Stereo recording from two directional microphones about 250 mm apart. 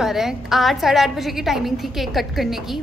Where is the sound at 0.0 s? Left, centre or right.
Centre.